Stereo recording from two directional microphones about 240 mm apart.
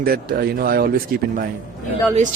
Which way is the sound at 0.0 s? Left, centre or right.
Right.